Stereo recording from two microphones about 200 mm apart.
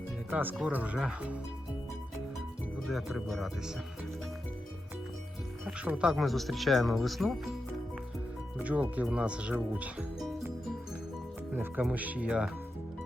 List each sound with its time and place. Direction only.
0.3 s speech: 10° right (ahead or behind)
2.8 s speech: centre (ahead or behind)
5.6 s speech: 5° right (ahead or behind)
8.5 s speech: 5° right (ahead or behind)
11.5 s speech: 5° right (ahead or behind)